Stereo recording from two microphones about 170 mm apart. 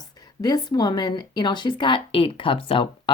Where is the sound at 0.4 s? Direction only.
25° left (ahead or behind).